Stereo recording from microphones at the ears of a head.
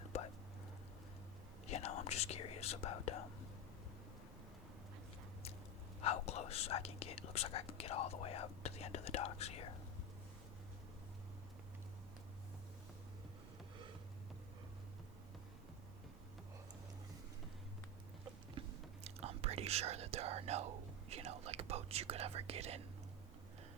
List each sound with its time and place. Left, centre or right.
1.6 s whispering: left
6.0 s speech: left
19.0 s whispering: right